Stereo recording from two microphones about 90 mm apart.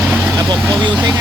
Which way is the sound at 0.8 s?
50° right (ahead or behind).